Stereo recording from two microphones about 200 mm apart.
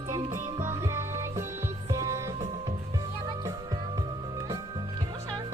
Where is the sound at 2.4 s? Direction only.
30° right (ahead or behind).